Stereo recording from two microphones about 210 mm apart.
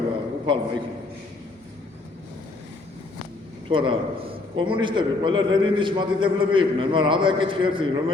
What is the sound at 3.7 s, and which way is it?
A man's voice, 25° right (ahead or behind).